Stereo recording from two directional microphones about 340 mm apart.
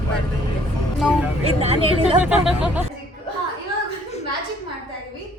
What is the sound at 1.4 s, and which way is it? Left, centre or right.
Speech, centre.